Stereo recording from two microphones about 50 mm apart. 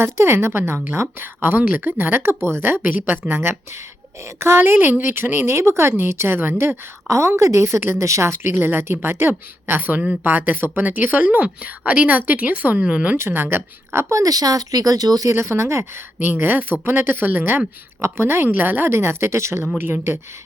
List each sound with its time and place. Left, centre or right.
0.0 s a woman's voice: right
4.2 s speech: right
7.1 s a woman's voice: right
7.8 s speech: right
8.5 s speech: right
9.8 s speech: right
13.1 s a woman's voice: right
15.3 s speech: right
16.2 s speech: right
18.0 s a woman's voice: right
18.4 s a woman's voice: right
19.8 s speech: right